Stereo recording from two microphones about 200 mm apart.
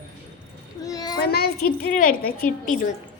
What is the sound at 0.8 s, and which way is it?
Speech, 20° left (ahead or behind).